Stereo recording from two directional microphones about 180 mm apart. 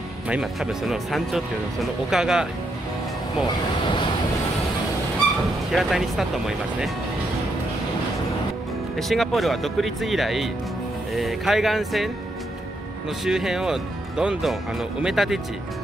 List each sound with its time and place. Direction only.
0.3 s speech: centre (ahead or behind)
3.4 s speech: 25° left (ahead or behind)
5.7 s speech: centre (ahead or behind)
8.9 s speech: centre (ahead or behind)
13.2 s speech: centre (ahead or behind)